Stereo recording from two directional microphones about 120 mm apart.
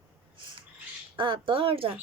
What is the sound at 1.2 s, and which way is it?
Speech, 45° right (ahead or behind).